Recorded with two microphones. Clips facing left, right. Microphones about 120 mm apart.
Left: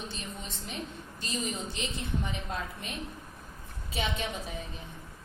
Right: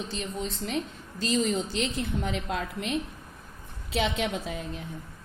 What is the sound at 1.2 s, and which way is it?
A woman's voice, 90° right.